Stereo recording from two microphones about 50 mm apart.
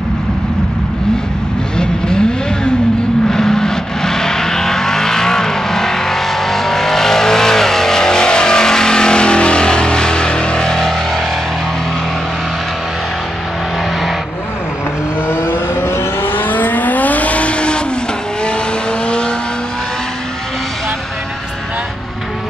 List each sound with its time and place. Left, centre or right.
1.8 s vehicle: centre
15.2 s vehicle: left; by 19.3 s centre